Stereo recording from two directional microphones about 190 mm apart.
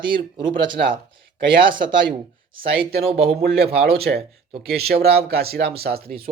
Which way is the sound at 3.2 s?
55° right (ahead or behind).